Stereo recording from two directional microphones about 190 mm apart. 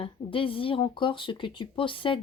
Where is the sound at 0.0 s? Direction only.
30° left (ahead or behind).